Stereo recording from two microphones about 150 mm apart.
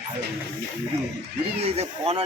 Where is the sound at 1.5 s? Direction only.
40° right (ahead or behind).